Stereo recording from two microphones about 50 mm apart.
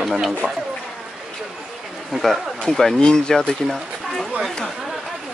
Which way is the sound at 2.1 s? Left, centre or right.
Centre.